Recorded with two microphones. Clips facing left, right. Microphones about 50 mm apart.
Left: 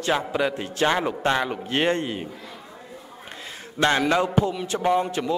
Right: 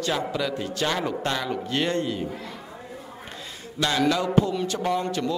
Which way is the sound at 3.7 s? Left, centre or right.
Left.